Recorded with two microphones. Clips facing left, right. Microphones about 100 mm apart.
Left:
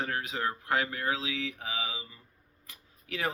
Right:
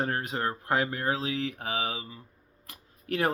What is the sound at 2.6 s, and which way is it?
Camera, 55° right (ahead or behind).